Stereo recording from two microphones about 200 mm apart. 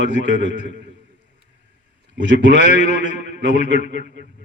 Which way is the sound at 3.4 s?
40° left (ahead or behind).